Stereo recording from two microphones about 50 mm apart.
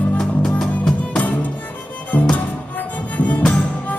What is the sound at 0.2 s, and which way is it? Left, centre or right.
Music, centre.